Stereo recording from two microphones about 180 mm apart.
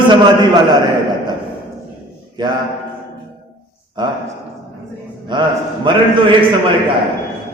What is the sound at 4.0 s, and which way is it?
Speech, 25° right (ahead or behind).